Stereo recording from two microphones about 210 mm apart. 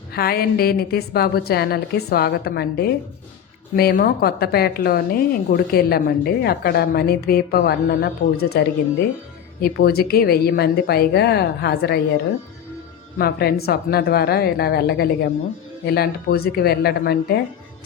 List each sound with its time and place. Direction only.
0.1 s a woman's voice: 45° left (ahead or behind)
13.1 s a woman's voice: 50° left (ahead or behind)